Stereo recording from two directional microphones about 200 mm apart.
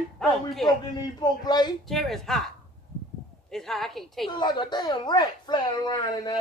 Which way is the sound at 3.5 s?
Centre (ahead or behind).